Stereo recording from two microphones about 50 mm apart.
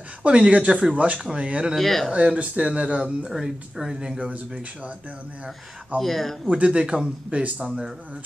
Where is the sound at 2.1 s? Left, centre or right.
Right.